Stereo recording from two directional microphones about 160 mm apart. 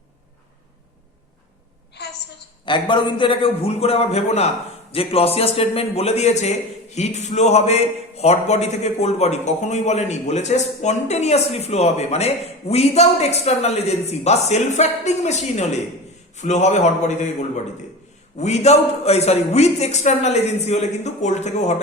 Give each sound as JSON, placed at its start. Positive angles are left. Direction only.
{"t": 2.6, "sound": "a man's voice", "side_deg": 30}
{"t": 18.3, "sound": "a man's voice", "side_deg": 45}